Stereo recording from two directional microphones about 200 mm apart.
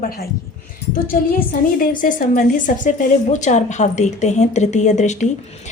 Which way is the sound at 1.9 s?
45° left (ahead or behind).